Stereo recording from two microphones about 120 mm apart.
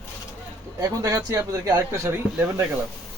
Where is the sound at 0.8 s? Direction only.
30° right (ahead or behind).